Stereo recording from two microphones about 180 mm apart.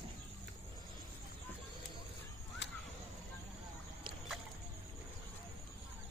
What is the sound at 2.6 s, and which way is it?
Whip, 75° left (ahead or behind).